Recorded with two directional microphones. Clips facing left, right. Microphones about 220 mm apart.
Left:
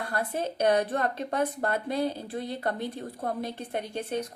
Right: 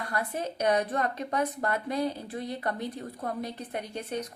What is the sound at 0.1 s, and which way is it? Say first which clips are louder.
A woman's voice: left 1 dB; 30° left (ahead or behind).